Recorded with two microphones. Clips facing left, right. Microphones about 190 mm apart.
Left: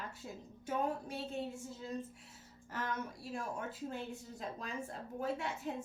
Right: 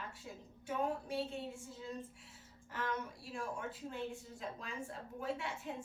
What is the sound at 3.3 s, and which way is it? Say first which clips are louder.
A woman's voice: left 1 dB; 40° left (ahead or behind).